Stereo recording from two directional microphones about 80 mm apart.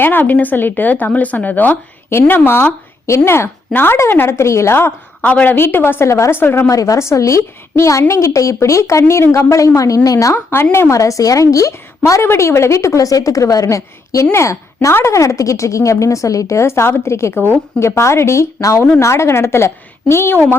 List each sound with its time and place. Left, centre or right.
0.0 s speech: left
6.7 s a woman's voice: left
10.3 s a woman's voice: left